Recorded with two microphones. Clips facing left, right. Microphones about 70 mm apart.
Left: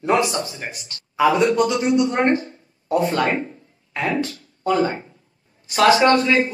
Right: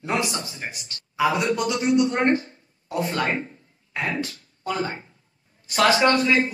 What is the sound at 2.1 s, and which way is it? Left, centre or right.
Speech, centre.